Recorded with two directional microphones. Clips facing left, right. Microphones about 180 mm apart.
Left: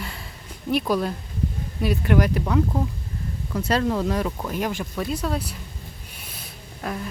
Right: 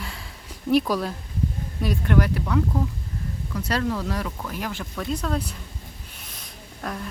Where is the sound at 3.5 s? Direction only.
25° left (ahead or behind).